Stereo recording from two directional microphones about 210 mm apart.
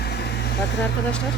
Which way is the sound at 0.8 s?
5° left (ahead or behind).